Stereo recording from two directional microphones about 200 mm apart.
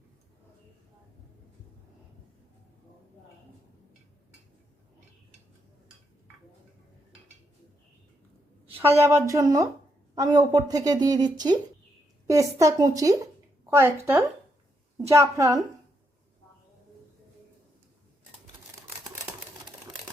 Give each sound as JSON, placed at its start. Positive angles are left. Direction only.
{"t": 8.8, "sound": "speech", "side_deg": -15}